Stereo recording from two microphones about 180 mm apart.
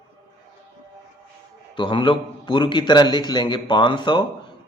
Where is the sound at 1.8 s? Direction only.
25° left (ahead or behind).